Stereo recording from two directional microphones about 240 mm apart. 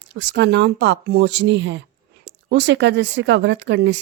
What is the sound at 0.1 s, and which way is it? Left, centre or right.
Speech, right.